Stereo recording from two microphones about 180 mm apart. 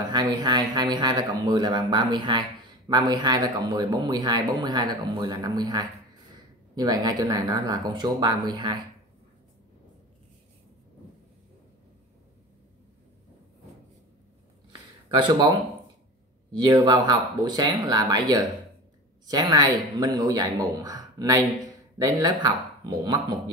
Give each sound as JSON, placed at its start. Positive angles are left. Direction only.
{"t": 0.1, "sound": "speech", "side_deg": -25}
{"t": 15.0, "sound": "speech", "side_deg": -25}
{"t": 16.5, "sound": "speech", "side_deg": -25}